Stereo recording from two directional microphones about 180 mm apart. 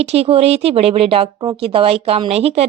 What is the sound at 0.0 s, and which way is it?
Speech, 35° right (ahead or behind).